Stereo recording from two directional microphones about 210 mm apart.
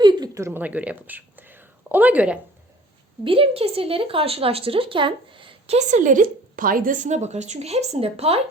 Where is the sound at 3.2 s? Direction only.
25° right (ahead or behind).